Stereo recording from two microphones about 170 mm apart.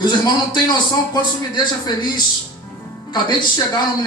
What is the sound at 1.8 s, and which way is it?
A man's voice, 25° left (ahead or behind).